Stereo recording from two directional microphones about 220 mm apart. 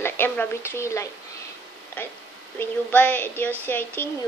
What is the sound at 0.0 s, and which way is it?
Speech, 10° left (ahead or behind).